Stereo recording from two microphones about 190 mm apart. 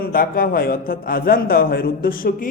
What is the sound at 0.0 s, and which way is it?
A man's voice, 50° left (ahead or behind).